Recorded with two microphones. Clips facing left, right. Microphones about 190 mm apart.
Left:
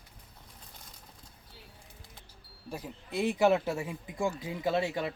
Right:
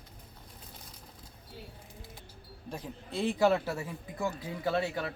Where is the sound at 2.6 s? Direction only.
10° left (ahead or behind).